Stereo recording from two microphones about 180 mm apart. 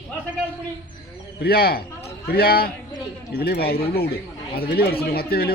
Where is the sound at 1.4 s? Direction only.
60° left (ahead or behind).